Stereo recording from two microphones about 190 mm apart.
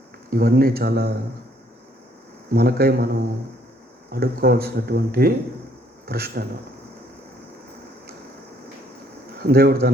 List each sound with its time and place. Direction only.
0.3 s speech: 50° right (ahead or behind)
2.5 s speech: 55° right (ahead or behind)
9.4 s speech: 55° right (ahead or behind)